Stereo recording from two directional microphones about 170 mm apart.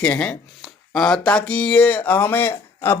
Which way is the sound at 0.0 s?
5° left (ahead or behind).